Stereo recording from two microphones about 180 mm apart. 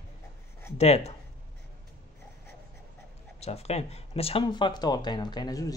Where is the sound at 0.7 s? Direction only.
35° left (ahead or behind).